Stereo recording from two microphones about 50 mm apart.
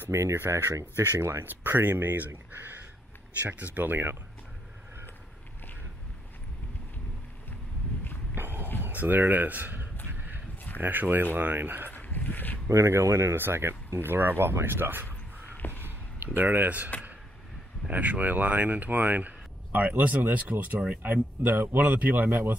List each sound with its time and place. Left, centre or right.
0.1 s speech: right
1.4 s speech: right
8.4 s a sound: right
8.8 s speech: right
11.9 s a sound: left
12.6 s speech: right
13.4 s speech: right
15.0 s a sound: left
16.3 s speech: right